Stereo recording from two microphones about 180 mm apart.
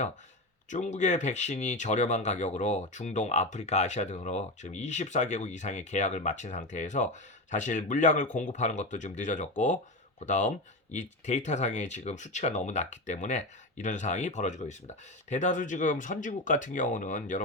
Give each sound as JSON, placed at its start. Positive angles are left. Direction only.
{"t": 0.7, "sound": "speech", "side_deg": 45}